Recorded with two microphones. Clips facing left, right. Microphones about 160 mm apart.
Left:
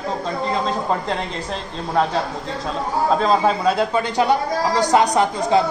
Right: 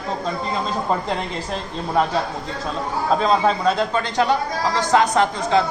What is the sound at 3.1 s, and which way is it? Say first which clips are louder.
A man's voice: right 1 dB; centre (ahead or behind).